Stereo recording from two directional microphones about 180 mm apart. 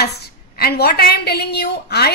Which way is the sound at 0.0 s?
60° left (ahead or behind).